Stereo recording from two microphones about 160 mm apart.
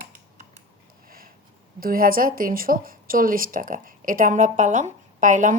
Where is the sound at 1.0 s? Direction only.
65° right (ahead or behind).